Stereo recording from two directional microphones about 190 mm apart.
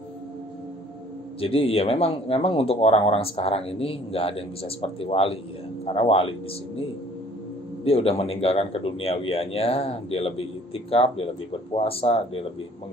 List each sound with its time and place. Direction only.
1.4 s speech: 30° left (ahead or behind)
7.8 s speech: 30° left (ahead or behind)